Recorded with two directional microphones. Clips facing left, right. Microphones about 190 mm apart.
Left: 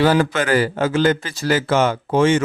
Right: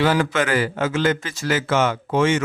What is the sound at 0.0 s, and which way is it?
A man's voice, 35° left (ahead or behind).